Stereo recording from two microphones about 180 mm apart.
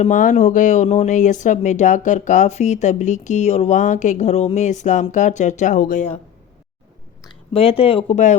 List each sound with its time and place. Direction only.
0.0 s speech: 45° left (ahead or behind)
7.3 s speech: 30° left (ahead or behind)